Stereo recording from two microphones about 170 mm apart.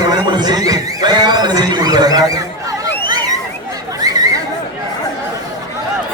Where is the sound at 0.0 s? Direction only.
25° right (ahead or behind).